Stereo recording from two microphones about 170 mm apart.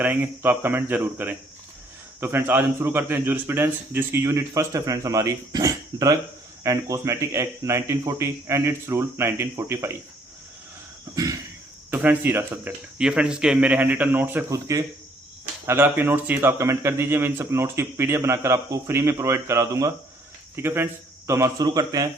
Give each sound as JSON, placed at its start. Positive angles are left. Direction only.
{"t": 0.0, "sound": "a man's voice", "side_deg": -10}
{"t": 11.1, "sound": "a sound", "side_deg": -20}
{"t": 11.9, "sound": "a man's voice", "side_deg": -10}